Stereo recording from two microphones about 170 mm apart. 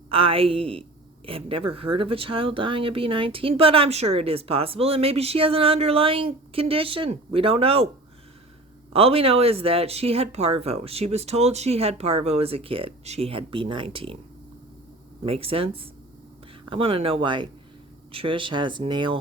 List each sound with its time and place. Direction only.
0.1 s a woman's voice: 35° right (ahead or behind)
8.9 s a woman's voice: 35° right (ahead or behind)
15.2 s a woman's voice: 35° right (ahead or behind)